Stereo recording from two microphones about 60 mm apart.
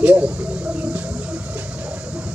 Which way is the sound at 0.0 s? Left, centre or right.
Right.